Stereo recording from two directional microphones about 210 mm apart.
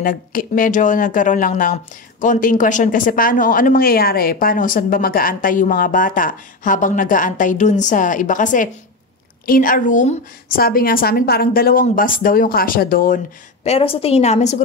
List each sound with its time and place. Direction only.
0.0 s a woman's voice: 40° left (ahead or behind)
13.7 s a woman's voice: 25° left (ahead or behind)